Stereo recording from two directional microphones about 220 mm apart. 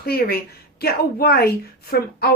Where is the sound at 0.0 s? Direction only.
45° left (ahead or behind).